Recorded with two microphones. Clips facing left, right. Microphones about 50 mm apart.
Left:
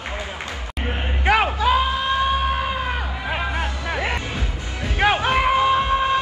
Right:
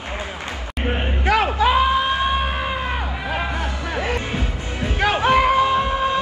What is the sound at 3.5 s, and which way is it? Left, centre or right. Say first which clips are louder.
Music: even; left.